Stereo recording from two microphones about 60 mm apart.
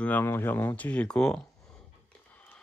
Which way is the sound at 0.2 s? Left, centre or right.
Left.